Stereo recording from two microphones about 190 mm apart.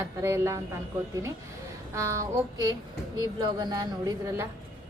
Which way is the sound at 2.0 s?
15° right (ahead or behind).